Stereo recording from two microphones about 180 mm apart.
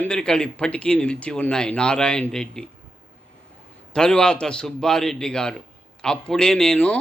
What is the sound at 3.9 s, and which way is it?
A man's voice, 5° left (ahead or behind).